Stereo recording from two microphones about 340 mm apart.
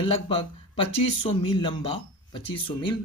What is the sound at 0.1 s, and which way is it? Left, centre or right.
Speech, centre.